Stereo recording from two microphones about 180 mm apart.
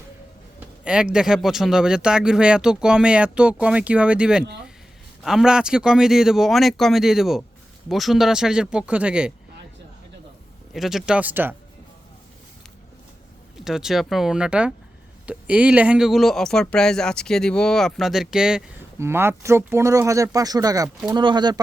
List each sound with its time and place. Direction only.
0.9 s speech: 5° right (ahead or behind)
10.8 s speech: centre (ahead or behind)
13.7 s speech: centre (ahead or behind); by 21.6 s 25° right (ahead or behind)